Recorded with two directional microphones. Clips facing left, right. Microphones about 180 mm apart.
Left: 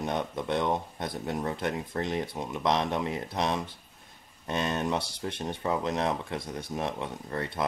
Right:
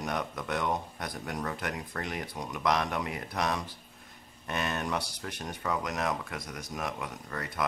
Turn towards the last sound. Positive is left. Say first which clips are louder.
# left 3 dB
turn(degrees=25)  # may be behind; listen again after turning